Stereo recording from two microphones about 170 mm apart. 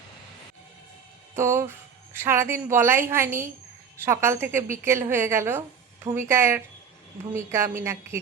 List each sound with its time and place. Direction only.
1.4 s a woman's voice: 15° right (ahead or behind)